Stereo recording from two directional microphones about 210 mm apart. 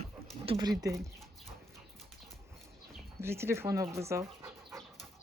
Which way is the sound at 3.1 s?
10° right (ahead or behind).